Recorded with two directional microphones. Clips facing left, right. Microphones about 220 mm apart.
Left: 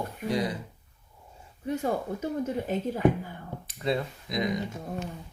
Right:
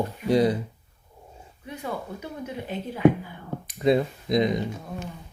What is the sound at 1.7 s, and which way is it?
Speech, 45° left (ahead or behind).